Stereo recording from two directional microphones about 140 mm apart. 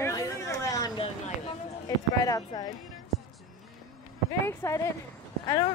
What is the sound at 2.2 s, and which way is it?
Speech, 25° left (ahead or behind).